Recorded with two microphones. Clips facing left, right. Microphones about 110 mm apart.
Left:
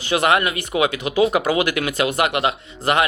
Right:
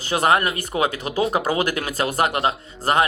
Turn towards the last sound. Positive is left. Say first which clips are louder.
# even
turn(degrees=-40)  # may be behind; listen again after turning